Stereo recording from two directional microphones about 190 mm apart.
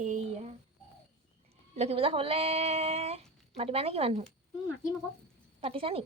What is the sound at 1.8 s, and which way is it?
Speech, 30° right (ahead or behind).